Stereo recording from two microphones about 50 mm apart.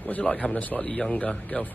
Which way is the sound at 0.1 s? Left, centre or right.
Left.